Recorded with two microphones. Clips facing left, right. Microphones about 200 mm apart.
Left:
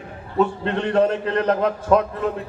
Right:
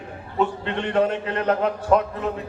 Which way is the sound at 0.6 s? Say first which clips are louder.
Left 3 dB; 35° left (ahead or behind).